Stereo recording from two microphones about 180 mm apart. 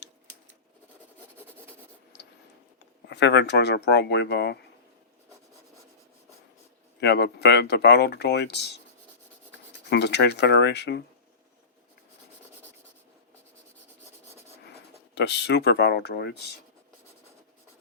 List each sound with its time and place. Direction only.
3.1 s speech: 70° left (ahead or behind)
7.0 s speech: 70° left (ahead or behind)
9.9 s speech: 70° left (ahead or behind)
15.1 s speech: 70° left (ahead or behind)